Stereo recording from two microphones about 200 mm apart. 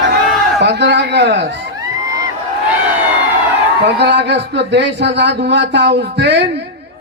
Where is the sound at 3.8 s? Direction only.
60° right (ahead or behind).